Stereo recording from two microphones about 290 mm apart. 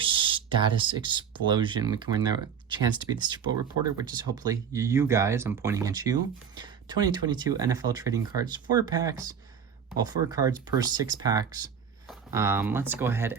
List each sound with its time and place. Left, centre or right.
0.0 s speech: centre